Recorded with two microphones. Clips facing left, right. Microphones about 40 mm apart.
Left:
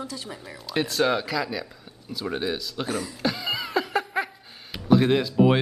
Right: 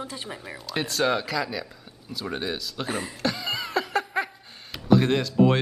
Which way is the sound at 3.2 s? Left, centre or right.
Centre.